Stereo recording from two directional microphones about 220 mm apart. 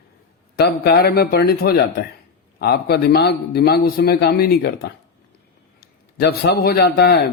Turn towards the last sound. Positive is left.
turn(degrees=50)  # may be behind; listen again after turning